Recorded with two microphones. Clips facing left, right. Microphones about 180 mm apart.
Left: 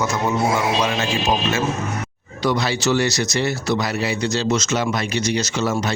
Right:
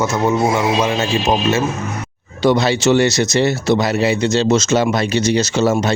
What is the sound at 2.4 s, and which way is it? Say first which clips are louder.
Speech: right 6 dB; 25° right (ahead or behind).